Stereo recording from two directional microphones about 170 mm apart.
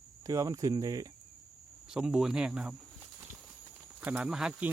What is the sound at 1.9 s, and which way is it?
Speech, 5° right (ahead or behind).